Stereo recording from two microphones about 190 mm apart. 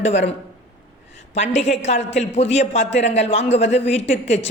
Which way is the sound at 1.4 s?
35° left (ahead or behind).